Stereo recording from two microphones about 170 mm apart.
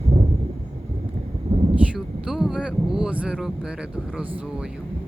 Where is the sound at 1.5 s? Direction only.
40° right (ahead or behind).